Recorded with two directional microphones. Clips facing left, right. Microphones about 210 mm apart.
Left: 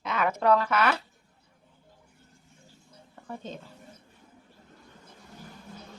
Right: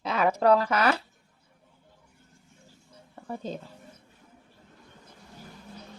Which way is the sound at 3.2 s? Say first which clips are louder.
Right 4 dB; 35° right (ahead or behind).